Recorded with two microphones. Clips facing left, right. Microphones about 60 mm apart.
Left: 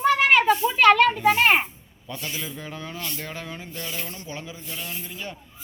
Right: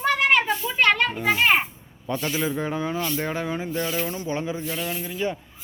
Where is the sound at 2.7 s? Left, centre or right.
Centre.